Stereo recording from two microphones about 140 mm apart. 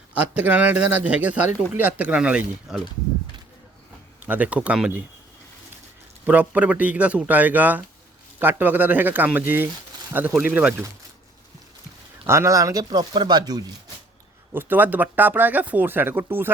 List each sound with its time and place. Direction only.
0.1 s speech: 10° right (ahead or behind)
4.3 s speech: 10° right (ahead or behind)
6.2 s speech: 10° right (ahead or behind)
12.2 s speech: 20° right (ahead or behind)
14.5 s speech: 15° right (ahead or behind)